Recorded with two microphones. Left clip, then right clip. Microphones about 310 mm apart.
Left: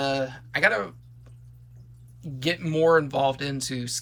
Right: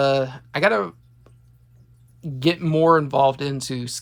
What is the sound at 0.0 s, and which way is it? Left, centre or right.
Speech, centre.